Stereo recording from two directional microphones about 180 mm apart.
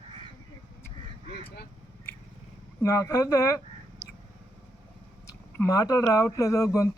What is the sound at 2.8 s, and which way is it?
Speech, 20° left (ahead or behind).